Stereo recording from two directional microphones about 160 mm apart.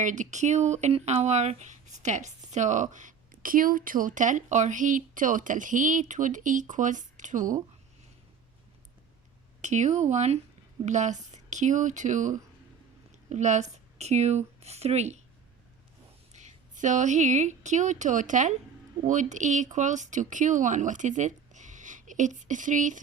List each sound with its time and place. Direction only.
0.0 s speech: 50° right (ahead or behind)
9.6 s speech: 50° right (ahead or behind)
16.3 s speech: 45° right (ahead or behind)